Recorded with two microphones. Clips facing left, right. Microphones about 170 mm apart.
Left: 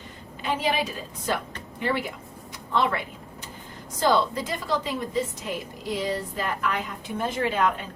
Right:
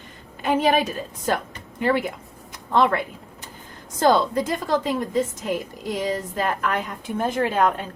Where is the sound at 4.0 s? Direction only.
50° right (ahead or behind).